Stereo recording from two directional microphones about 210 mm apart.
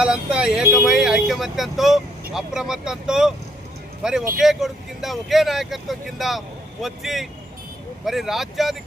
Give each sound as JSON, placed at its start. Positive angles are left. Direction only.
{"t": 0.0, "sound": "speech", "side_deg": -5}